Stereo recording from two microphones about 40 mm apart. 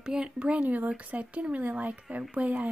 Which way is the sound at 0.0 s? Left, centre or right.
Centre.